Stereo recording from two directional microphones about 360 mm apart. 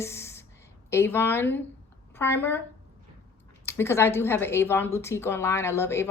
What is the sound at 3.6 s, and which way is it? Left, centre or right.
A woman's voice, centre.